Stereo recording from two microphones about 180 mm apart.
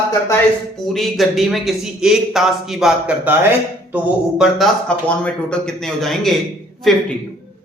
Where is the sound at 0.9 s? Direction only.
Centre (ahead or behind).